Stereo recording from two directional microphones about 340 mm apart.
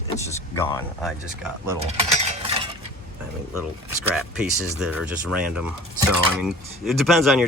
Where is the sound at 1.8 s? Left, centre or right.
Centre.